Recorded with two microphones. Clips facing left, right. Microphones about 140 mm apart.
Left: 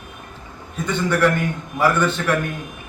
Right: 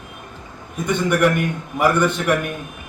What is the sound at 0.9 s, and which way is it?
A man's voice, 15° right (ahead or behind).